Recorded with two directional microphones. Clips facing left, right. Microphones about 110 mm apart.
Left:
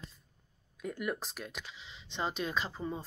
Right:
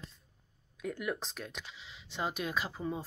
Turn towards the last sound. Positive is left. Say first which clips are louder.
# even
turn(degrees=-5)  # may be behind; listen again after turning